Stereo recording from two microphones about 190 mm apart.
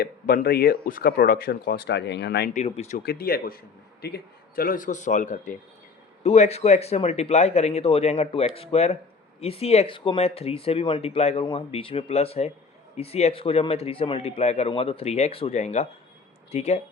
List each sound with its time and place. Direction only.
0.0 s speech: 50° left (ahead or behind)
2.5 s speech: 35° left (ahead or behind)
3.0 s speech: 55° left (ahead or behind); by 16.8 s 35° left (ahead or behind)